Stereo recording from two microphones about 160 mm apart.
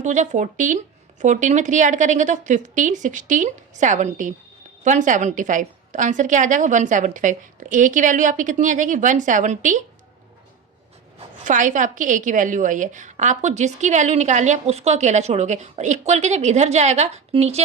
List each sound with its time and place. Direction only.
0.0 s a woman's voice: 50° right (ahead or behind)
11.4 s a woman's voice: 55° right (ahead or behind)